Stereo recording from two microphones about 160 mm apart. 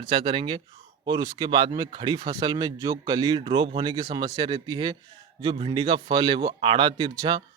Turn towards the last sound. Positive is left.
turn(degrees=-30)  # may be behind; listen again after turning